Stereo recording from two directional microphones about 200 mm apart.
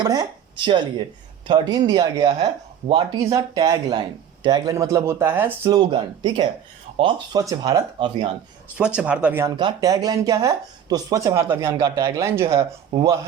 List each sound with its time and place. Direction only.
0.0 s speech: 20° right (ahead or behind)
9.0 s speech: 5° right (ahead or behind)
9.6 s speech: 20° right (ahead or behind)